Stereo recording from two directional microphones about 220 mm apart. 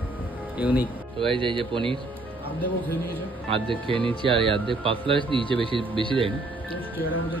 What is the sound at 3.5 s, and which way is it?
Speech, 25° right (ahead or behind).